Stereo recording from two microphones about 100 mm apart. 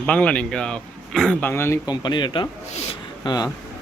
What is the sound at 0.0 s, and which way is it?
Speech, 10° left (ahead or behind).